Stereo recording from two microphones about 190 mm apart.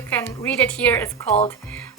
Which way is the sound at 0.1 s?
10° left (ahead or behind).